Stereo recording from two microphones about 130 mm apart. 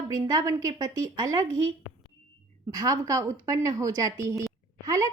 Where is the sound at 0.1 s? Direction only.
25° right (ahead or behind).